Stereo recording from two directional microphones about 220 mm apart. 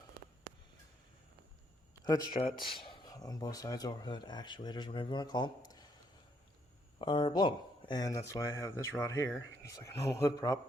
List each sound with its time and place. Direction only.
2.0 s speech: 20° left (ahead or behind)
7.0 s speech: 20° left (ahead or behind)